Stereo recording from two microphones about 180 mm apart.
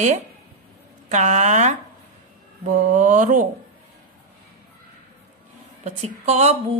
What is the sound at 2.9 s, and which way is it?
Speech, 45° right (ahead or behind).